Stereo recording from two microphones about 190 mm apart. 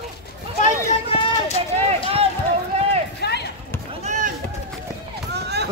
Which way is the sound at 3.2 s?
60° left (ahead or behind).